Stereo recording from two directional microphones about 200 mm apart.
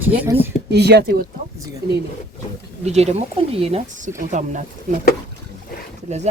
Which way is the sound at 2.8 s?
35° right (ahead or behind).